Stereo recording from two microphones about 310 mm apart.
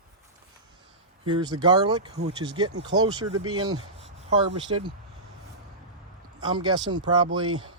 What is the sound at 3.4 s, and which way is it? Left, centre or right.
Speech, right.